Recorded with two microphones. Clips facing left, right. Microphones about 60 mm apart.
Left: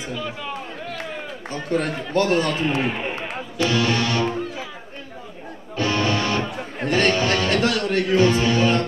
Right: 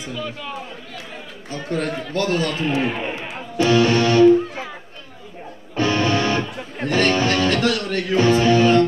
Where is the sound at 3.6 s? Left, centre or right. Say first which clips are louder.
Right 5 dB; right.